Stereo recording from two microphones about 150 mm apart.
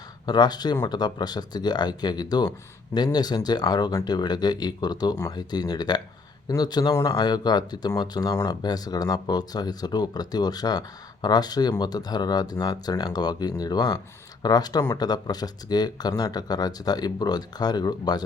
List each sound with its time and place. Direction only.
0.3 s speech: 30° left (ahead or behind)